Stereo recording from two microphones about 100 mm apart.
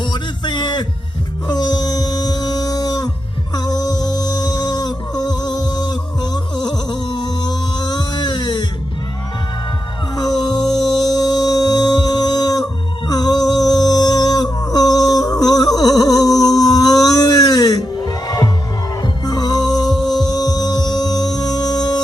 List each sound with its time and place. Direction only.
0.0 s music: 45° left (ahead or behind)
10.2 s music: 40° left (ahead or behind)